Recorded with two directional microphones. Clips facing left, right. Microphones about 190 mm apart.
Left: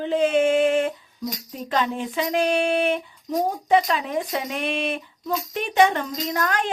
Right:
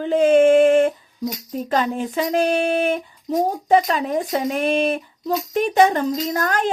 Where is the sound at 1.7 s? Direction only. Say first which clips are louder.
Right 3 dB; 40° right (ahead or behind).